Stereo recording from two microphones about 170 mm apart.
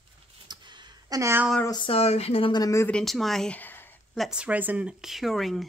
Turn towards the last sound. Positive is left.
turn(degrees=0)  # may be behind; listen again after turning